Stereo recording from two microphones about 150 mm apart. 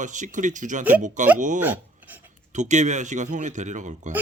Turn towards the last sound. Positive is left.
turn(degrees=-55)  # may be behind; listen again after turning